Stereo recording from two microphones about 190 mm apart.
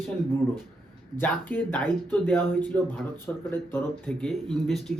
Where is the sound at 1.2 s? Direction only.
10° left (ahead or behind).